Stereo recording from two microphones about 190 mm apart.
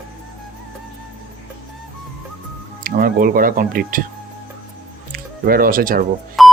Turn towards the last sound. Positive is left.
turn(degrees=0)  # may be behind; listen again after turning